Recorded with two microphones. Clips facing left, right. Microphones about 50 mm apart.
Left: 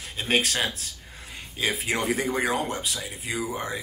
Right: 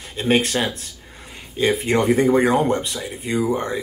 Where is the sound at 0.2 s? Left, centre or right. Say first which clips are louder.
Right 6 dB; centre.